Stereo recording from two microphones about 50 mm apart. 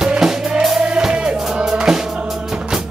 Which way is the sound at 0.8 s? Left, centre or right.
Centre.